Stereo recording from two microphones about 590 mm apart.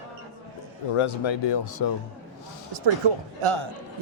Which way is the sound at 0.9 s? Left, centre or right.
Left.